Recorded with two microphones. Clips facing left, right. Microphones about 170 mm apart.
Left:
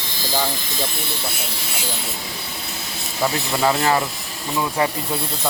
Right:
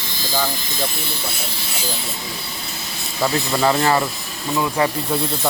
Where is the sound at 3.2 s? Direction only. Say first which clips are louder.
Right 2 dB; 5° left (ahead or behind).